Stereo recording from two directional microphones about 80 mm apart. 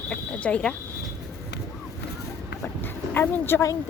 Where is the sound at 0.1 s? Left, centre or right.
Centre.